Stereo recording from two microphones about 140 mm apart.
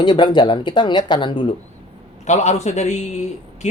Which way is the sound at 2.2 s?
55° left (ahead or behind).